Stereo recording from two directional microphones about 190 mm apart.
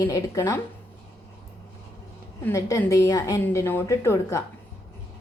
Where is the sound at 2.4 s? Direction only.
15° left (ahead or behind).